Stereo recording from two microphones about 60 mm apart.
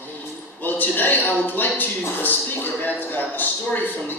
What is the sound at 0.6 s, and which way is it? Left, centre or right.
Speech, left.